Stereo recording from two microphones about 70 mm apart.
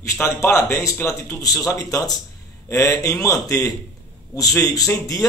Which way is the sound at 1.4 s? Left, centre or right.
Left.